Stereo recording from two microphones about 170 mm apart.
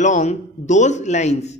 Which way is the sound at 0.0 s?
45° left (ahead or behind).